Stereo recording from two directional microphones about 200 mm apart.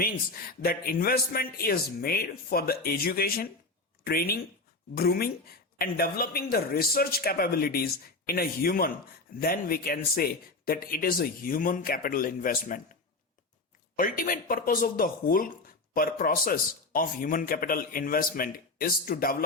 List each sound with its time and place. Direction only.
0.6 s speech: 45° left (ahead or behind)
13.9 s speech: 45° left (ahead or behind)